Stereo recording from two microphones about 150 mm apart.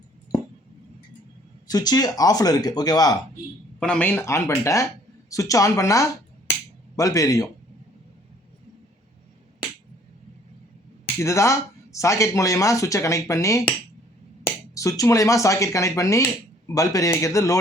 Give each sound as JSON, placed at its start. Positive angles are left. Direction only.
{"t": 1.6, "sound": "speech", "side_deg": 25}
{"t": 3.8, "sound": "speech", "side_deg": 5}
{"t": 11.2, "sound": "speech", "side_deg": 20}